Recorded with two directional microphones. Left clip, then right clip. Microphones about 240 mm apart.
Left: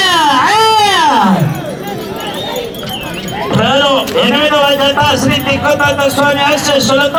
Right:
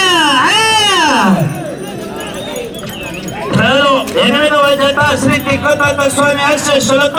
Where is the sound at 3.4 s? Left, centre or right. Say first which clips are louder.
Even; centre.